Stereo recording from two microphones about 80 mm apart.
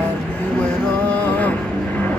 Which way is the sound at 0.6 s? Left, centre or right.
Centre.